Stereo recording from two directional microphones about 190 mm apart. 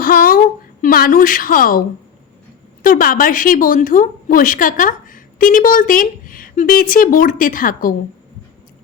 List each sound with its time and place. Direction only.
0.0 s a woman's voice: 50° left (ahead or behind)
2.8 s speech: 50° left (ahead or behind)